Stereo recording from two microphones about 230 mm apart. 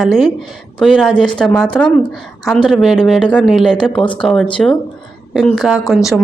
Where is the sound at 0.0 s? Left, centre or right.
Centre.